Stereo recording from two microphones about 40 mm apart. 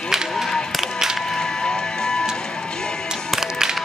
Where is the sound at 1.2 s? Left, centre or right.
Centre.